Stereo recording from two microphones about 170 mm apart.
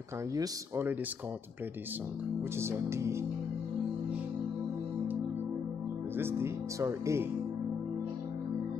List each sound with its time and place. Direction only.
0.3 s speech: 15° right (ahead or behind)
2.6 s speech: 15° right (ahead or behind)
6.1 s speech: 15° right (ahead or behind)